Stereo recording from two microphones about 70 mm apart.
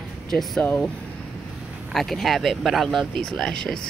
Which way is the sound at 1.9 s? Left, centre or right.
Centre.